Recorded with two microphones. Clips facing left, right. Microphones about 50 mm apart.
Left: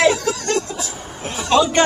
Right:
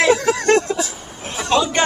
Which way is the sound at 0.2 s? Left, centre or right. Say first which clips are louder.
Right 6 dB; right.